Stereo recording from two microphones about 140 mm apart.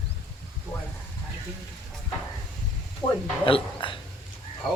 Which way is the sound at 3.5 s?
40° left (ahead or behind).